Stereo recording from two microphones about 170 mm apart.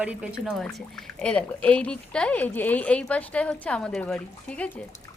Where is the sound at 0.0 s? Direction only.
5° right (ahead or behind).